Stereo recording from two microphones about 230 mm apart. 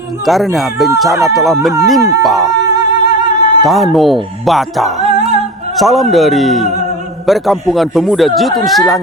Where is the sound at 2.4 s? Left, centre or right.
Centre.